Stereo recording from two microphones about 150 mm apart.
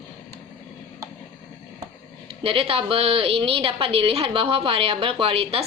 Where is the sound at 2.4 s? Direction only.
40° right (ahead or behind).